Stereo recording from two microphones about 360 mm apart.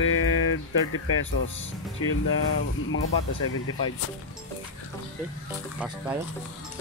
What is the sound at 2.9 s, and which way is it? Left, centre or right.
Speech, left.